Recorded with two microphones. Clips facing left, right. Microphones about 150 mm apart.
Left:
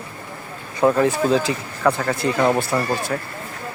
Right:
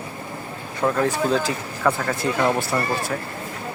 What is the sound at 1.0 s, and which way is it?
Speech, centre (ahead or behind).